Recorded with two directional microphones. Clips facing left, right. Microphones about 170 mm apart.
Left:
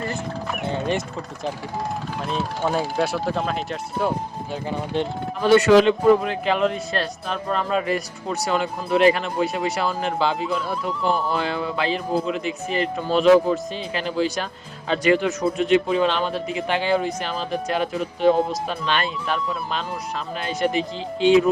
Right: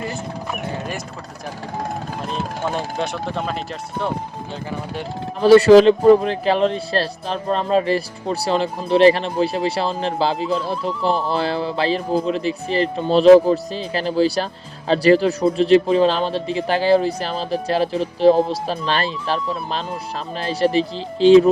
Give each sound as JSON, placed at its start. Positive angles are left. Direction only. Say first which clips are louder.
{"t": 0.7, "sound": "a sound", "louder": "left 4 dB", "side_deg": 25}
{"t": 2.3, "sound": "speech", "louder": "left 2 dB", "side_deg": 5}
{"t": 5.4, "sound": "speech", "louder": "right 5 dB", "side_deg": -35}